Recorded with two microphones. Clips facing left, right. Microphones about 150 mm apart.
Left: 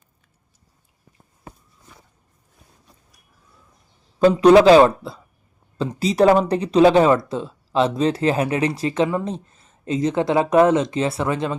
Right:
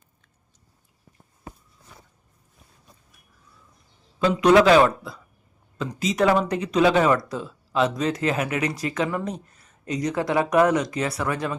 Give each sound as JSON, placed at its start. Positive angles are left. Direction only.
{"t": 4.2, "sound": "a man's voice", "side_deg": 35}